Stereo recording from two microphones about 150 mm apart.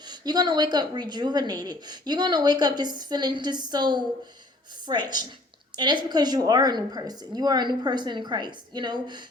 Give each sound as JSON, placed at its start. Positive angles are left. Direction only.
{"t": 0.1, "sound": "a woman's voice", "side_deg": -30}